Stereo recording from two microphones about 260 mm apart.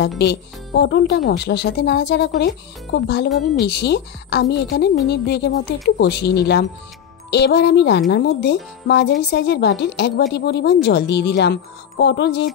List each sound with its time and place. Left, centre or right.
0.2 s speech: left